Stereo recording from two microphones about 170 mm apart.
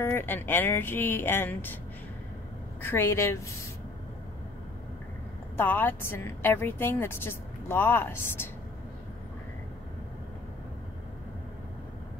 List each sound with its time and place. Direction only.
0.0 s a woman's voice: 15° left (ahead or behind)
2.8 s a woman's voice: 15° left (ahead or behind)
5.6 s a woman's voice: 10° left (ahead or behind)